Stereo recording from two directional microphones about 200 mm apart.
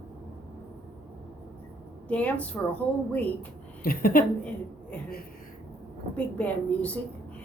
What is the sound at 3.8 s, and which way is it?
Speech, 45° left (ahead or behind).